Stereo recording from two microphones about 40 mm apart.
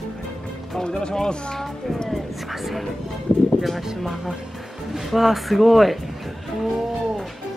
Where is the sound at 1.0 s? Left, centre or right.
Centre.